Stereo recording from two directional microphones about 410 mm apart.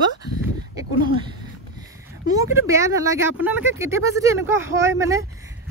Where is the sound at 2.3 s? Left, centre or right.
Centre.